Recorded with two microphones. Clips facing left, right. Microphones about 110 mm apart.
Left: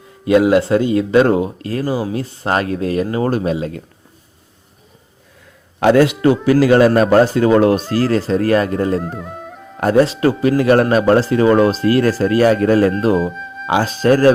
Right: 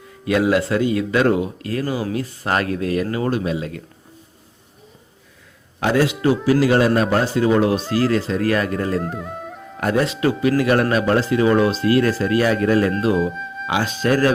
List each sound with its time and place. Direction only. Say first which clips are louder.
0.3 s speech: left 6 dB; 25° left (ahead or behind)
5.8 s speech: left 6 dB; 60° left (ahead or behind)
7.9 s speech: left 3 dB; 40° left (ahead or behind)
9.0 s music: left 1 dB; centre (ahead or behind)
9.8 s speech: left 6 dB; 35° left (ahead or behind)
13.1 s speech: left 2 dB; centre (ahead or behind)
13.7 s speech: left 6 dB; 35° left (ahead or behind)